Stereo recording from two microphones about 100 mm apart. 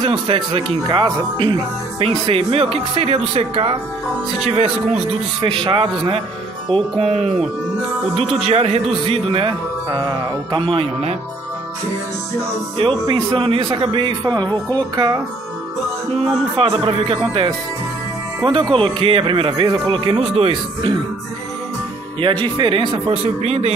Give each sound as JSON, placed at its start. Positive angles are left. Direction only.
{"t": 0.0, "sound": "speech", "side_deg": -60}
{"t": 2.0, "sound": "speech", "side_deg": -70}
{"t": 5.4, "sound": "speech", "side_deg": -60}
{"t": 6.7, "sound": "speech", "side_deg": -90}
{"t": 8.5, "sound": "speech", "side_deg": -90}
{"t": 9.3, "sound": "speech", "side_deg": -60}
{"t": 13.0, "sound": "speech", "side_deg": -55}
{"t": 16.5, "sound": "speech", "side_deg": -65}
{"t": 22.4, "sound": "speech", "side_deg": -55}